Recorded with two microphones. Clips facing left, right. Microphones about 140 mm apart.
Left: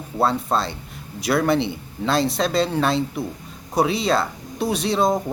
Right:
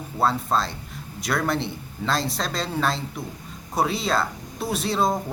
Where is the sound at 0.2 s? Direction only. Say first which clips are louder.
Left 2 dB; centre (ahead or behind).